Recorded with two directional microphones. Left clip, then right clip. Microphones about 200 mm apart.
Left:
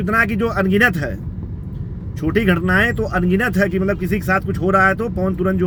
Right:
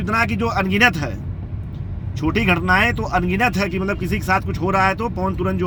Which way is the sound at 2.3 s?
15° left (ahead or behind).